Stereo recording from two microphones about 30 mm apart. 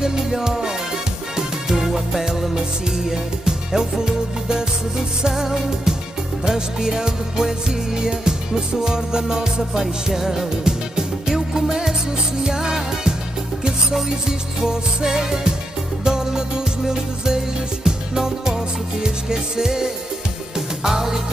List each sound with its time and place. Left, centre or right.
0.4 s music: right
5.3 s music: centre
9.6 s music: centre
13.9 s music: centre